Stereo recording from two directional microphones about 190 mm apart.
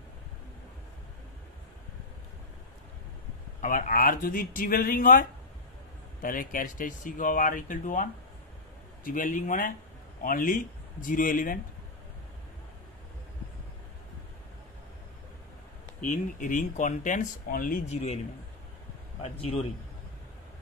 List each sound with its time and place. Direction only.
3.6 s speech: 45° left (ahead or behind)
6.2 s speech: 45° left (ahead or behind)
16.0 s speech: 45° left (ahead or behind)